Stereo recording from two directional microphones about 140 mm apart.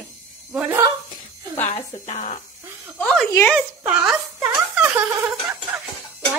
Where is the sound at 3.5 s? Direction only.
10° right (ahead or behind).